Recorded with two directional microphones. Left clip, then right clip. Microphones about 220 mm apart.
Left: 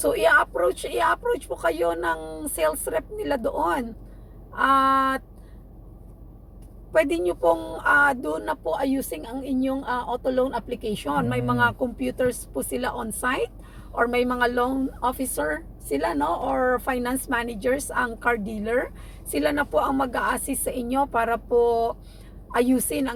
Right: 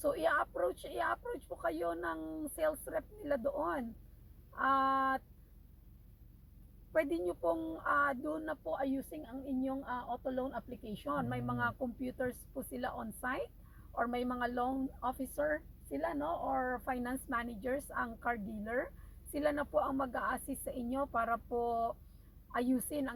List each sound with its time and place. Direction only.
0.0 s speech: 5° right (ahead or behind)
7.1 s speech: 5° right (ahead or behind)
16.6 s speech: 5° right (ahead or behind)